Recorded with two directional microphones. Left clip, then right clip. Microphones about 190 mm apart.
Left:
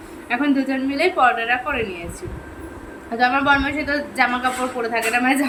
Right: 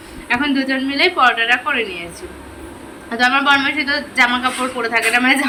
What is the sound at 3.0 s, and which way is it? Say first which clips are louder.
A woman's voice: right 3 dB; 10° left (ahead or behind).